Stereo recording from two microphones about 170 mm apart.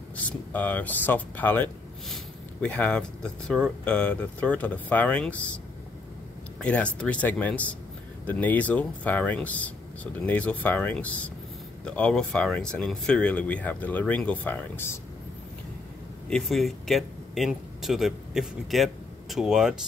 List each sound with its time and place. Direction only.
0.1 s speech: 10° left (ahead or behind)
6.6 s speech: 5° left (ahead or behind)
16.3 s speech: 5° left (ahead or behind)